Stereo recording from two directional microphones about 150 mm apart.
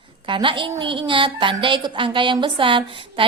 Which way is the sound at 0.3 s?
35° right (ahead or behind).